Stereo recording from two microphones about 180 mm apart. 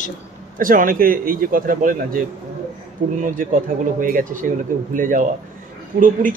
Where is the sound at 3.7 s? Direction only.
50° right (ahead or behind).